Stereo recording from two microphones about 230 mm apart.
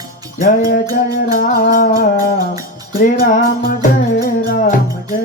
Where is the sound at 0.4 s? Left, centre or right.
Left.